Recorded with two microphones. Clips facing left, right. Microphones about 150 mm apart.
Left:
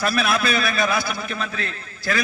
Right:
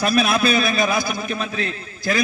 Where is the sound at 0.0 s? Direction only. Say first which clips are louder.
Right 3 dB; 20° right (ahead or behind).